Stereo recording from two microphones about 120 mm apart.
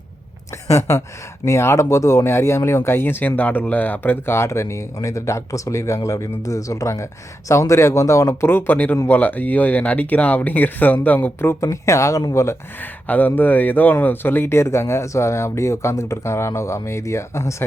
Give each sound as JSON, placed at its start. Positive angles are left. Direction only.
{"t": 0.7, "sound": "speech", "side_deg": 25}
{"t": 13.1, "sound": "speech", "side_deg": 15}